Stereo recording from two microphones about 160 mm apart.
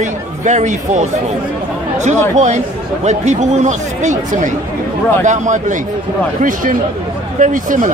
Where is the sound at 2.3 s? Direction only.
45° right (ahead or behind).